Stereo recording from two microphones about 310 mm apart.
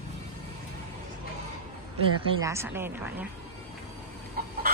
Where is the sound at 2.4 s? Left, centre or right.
Centre.